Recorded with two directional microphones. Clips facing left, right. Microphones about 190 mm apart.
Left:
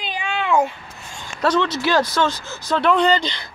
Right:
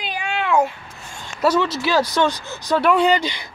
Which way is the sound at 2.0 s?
15° right (ahead or behind).